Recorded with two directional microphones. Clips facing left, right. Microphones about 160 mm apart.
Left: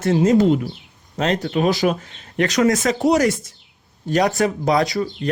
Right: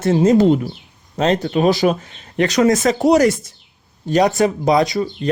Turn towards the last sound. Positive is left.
turn(degrees=-20)  # may be behind; listen again after turning